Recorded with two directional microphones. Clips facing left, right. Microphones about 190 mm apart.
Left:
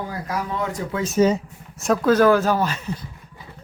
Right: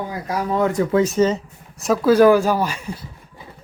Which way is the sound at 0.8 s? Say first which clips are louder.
Right 9 dB; 65° right (ahead or behind).